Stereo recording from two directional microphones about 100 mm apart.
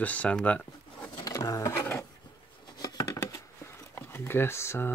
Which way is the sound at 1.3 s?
30° left (ahead or behind).